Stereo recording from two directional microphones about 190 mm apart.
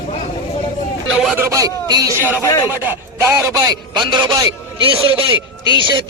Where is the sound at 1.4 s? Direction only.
15° right (ahead or behind).